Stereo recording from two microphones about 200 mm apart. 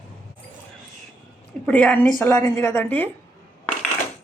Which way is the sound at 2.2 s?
15° left (ahead or behind).